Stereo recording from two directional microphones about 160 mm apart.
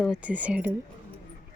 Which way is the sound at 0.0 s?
5° right (ahead or behind).